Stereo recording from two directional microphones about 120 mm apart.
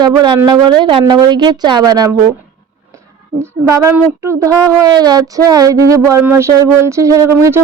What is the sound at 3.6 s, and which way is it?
Speech, 25° right (ahead or behind).